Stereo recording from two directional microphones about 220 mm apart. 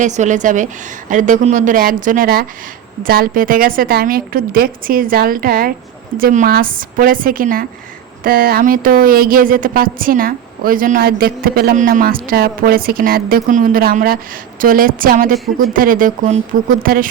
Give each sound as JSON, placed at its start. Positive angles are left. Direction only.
{"t": 0.0, "sound": "speech", "side_deg": -35}